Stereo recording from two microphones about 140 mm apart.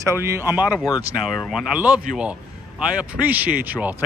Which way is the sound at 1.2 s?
Centre (ahead or behind).